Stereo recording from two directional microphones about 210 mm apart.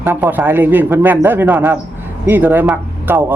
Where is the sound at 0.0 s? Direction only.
10° right (ahead or behind).